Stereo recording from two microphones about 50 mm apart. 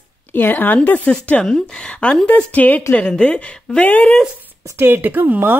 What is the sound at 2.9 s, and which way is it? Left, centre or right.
A woman's voice, left.